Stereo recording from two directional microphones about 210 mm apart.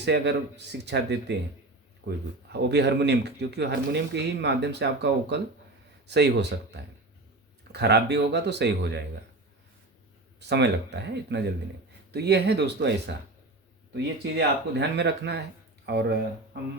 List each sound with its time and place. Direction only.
0.0 s speech: 55° right (ahead or behind)
7.7 s speech: 50° right (ahead or behind)
10.5 s speech: 55° right (ahead or behind)